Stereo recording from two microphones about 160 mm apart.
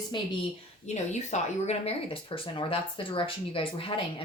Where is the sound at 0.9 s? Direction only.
45° left (ahead or behind).